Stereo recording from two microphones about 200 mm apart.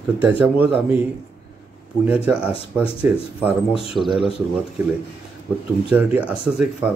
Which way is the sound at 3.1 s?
10° right (ahead or behind).